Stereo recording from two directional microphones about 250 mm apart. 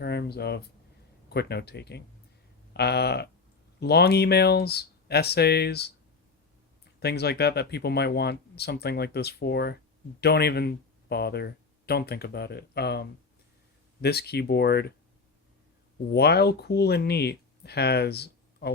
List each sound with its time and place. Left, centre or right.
0.0 s speech: left
7.0 s speech: left
16.1 s speech: left